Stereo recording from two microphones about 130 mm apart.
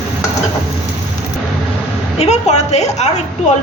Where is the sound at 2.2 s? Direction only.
60° left (ahead or behind).